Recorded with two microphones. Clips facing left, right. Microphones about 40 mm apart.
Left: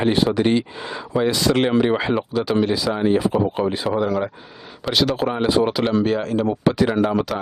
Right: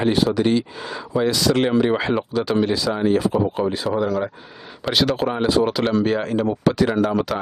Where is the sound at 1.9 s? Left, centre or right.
Centre.